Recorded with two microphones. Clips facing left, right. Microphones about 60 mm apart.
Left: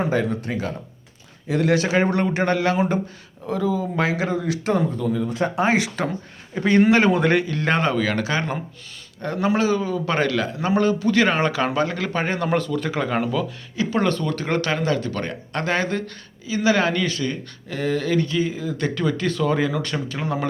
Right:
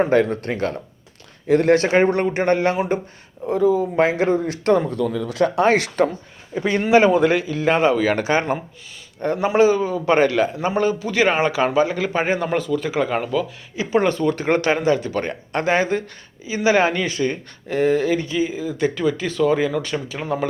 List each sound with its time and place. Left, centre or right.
0.1 s speech: right
1.5 s speech: right
2.0 s speech: right
3.4 s speech: centre
3.9 s speech: right
4.6 s speech: right
5.6 s speech: centre
6.6 s speech: centre
8.0 s speech: right
10.8 s speech: centre
13.7 s speech: centre